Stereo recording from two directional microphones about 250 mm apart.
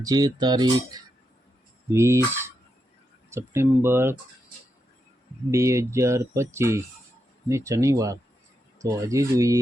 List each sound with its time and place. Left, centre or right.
0.0 s speech: centre
5.5 s speech: centre